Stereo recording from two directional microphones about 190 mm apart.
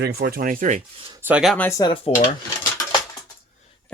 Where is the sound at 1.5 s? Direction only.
15° left (ahead or behind).